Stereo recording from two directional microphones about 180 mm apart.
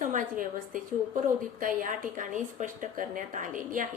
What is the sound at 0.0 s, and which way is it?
A woman's voice, 45° right (ahead or behind).